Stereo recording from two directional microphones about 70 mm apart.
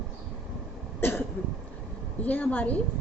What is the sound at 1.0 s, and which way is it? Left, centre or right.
Cough, left.